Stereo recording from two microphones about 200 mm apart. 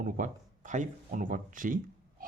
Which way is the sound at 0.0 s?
40° right (ahead or behind).